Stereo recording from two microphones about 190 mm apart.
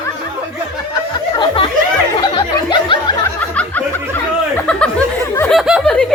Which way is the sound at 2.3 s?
25° left (ahead or behind).